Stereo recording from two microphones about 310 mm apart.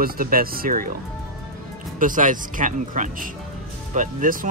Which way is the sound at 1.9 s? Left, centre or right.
Right.